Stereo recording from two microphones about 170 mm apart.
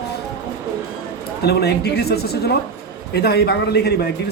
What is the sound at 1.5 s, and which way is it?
A man's voice, 75° left (ahead or behind).